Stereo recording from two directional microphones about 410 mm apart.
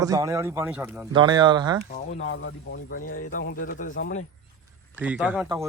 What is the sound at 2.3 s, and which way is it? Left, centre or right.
Speech, left.